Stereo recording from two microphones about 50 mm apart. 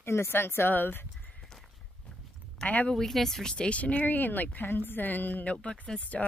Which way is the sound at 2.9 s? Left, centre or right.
Centre.